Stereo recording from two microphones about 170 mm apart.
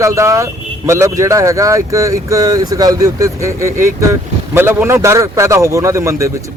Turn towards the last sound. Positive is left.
turn(degrees=-15)  # may be behind; listen again after turning